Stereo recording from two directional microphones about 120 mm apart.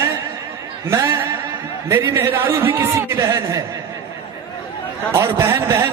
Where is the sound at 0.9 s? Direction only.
25° right (ahead or behind).